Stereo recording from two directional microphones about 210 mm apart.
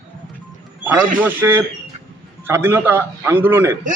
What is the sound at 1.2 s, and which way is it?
A man's voice, 10° right (ahead or behind).